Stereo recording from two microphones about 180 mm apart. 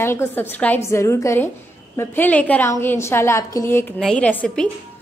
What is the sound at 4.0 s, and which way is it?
Speech, 5° left (ahead or behind).